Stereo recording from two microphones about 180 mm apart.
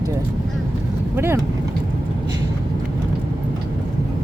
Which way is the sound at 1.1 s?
15° right (ahead or behind).